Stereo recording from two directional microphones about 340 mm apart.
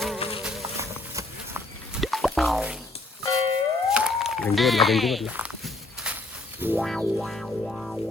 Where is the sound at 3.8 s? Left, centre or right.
Centre.